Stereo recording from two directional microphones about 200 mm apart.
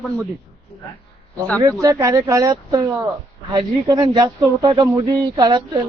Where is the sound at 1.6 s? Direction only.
15° right (ahead or behind).